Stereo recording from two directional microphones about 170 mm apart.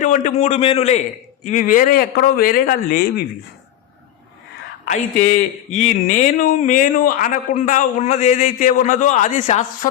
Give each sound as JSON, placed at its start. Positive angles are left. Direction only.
{"t": 0.0, "sound": "a man's voice", "side_deg": 50}
{"t": 4.9, "sound": "speech", "side_deg": 50}